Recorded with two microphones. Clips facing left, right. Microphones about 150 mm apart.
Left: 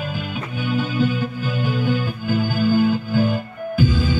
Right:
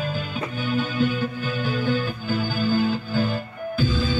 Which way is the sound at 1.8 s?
10° left (ahead or behind).